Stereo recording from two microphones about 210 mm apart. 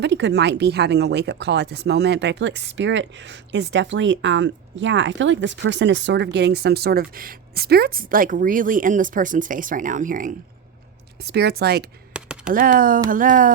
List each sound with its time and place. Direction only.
0.0 s speech: 55° right (ahead or behind); by 10.3 s 40° right (ahead or behind)
11.2 s speech: 50° right (ahead or behind)
12.1 s a sound: 5° right (ahead or behind)
12.5 s speech: 40° right (ahead or behind)